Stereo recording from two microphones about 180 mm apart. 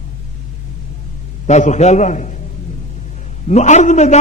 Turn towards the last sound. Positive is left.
turn(degrees=40)  # may be behind; listen again after turning